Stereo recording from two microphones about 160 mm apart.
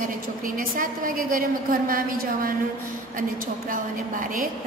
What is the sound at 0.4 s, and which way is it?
A woman's voice, 60° right (ahead or behind).